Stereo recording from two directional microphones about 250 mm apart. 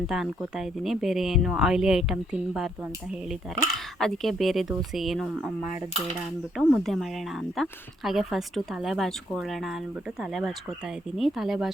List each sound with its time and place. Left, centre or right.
0.1 s speech: centre
4.0 s speech: centre
6.6 s speech: centre